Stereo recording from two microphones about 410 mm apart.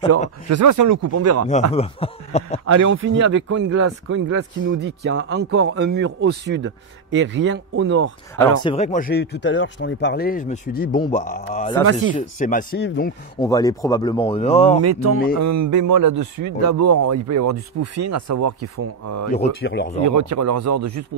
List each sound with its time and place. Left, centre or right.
0.5 s speech: right
1.5 s speech: centre
2.6 s speech: right
8.6 s speech: centre
13.4 s speech: centre
14.8 s speech: right
19.3 s speech: centre
20.0 s speech: right